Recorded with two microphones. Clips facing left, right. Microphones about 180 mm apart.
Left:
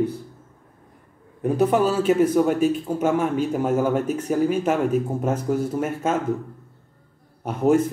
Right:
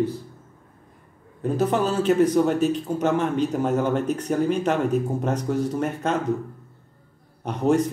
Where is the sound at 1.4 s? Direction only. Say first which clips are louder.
Left 3 dB; 10° left (ahead or behind).